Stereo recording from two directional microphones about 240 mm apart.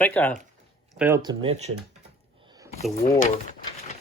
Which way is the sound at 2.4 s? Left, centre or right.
Centre.